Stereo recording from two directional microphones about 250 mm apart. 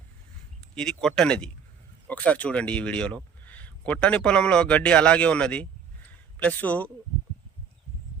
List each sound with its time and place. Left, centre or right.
0.8 s speech: centre